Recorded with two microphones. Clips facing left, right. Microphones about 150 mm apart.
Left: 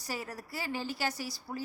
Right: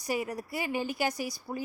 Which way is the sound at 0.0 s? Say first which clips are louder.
Right 7 dB; 15° right (ahead or behind).